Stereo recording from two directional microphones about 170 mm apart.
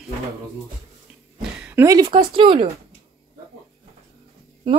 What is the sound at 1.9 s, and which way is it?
Speech, 30° right (ahead or behind).